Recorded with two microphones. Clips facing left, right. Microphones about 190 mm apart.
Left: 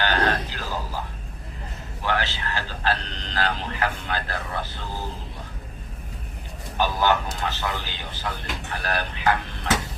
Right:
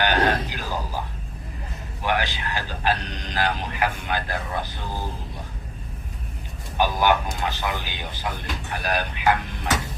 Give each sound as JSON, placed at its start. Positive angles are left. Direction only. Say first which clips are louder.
{"t": 0.0, "sound": "a sound", "louder": "right 2 dB", "side_deg": -15}
{"t": 2.0, "sound": "speech", "louder": "right 1 dB", "side_deg": -15}
{"t": 6.7, "sound": "speech", "louder": "right 1 dB", "side_deg": -15}